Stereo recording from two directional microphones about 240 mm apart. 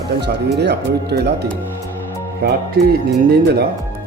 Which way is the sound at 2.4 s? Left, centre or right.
Right.